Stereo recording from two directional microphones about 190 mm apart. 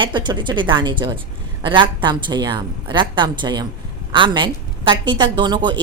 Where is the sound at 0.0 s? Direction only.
25° right (ahead or behind).